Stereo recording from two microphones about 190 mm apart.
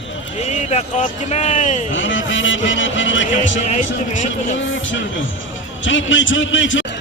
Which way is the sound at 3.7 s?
40° left (ahead or behind).